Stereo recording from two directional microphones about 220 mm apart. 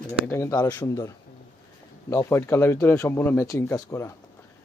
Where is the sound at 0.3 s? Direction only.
15° left (ahead or behind).